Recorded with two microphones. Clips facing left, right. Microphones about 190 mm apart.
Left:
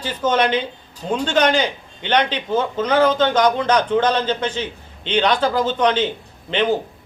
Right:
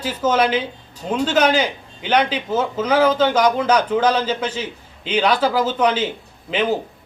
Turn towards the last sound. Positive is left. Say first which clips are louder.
# left 1 dB
turn(degrees=-5)  # may be behind; listen again after turning